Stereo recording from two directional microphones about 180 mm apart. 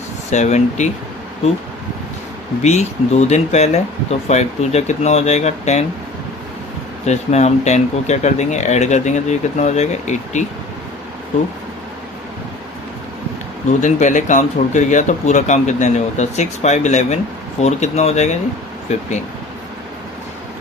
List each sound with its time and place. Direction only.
0.3 s speech: 40° left (ahead or behind)
2.6 s speech: 40° left (ahead or behind)
7.0 s speech: 40° left (ahead or behind)
13.7 s speech: 45° left (ahead or behind)